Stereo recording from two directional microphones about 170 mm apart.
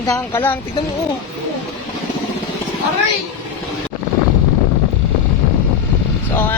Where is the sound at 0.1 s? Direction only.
15° left (ahead or behind).